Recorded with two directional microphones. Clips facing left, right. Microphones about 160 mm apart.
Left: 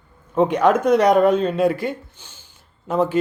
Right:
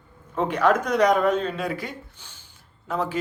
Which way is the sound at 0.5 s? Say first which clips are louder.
Left 2 dB; 20° left (ahead or behind).